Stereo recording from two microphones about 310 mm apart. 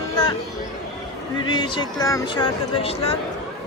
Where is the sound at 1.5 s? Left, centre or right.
Centre.